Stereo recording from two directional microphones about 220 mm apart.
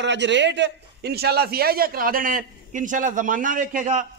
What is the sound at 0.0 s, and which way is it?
A man's voice, 55° right (ahead or behind).